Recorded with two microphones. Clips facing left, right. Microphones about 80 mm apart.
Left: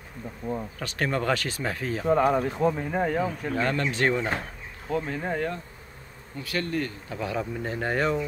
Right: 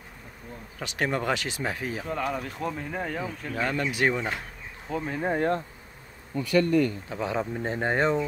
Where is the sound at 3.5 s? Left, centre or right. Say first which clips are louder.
Even; centre.